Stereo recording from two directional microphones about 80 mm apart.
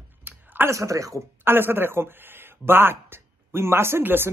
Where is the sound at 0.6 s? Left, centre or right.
Right.